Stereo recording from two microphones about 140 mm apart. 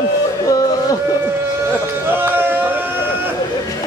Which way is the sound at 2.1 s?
15° right (ahead or behind).